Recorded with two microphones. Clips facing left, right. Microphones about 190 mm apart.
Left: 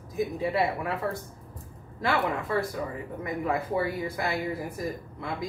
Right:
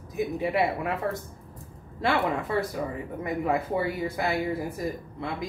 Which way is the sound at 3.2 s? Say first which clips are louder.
Right 2 dB; 25° right (ahead or behind).